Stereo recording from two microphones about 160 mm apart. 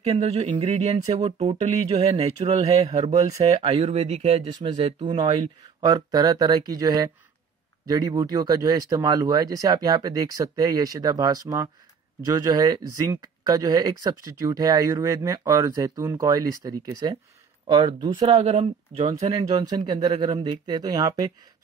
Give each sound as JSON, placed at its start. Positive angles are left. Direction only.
{"t": 0.0, "sound": "speech", "side_deg": -40}
{"t": 4.6, "sound": "speech", "side_deg": -30}
{"t": 18.5, "sound": "speech", "side_deg": -45}
{"t": 19.5, "sound": "speech", "side_deg": -25}